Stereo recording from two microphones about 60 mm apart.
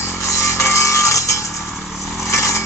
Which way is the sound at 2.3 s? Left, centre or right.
Left.